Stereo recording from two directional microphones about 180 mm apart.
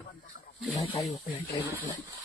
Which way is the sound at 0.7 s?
30° left (ahead or behind).